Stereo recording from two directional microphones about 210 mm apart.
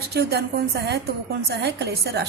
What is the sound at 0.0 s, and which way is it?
A woman's voice, 50° right (ahead or behind).